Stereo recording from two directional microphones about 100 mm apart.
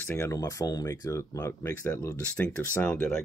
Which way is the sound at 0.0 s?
25° left (ahead or behind).